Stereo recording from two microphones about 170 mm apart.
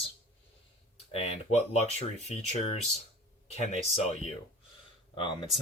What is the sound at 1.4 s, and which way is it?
Speech, 40° left (ahead or behind).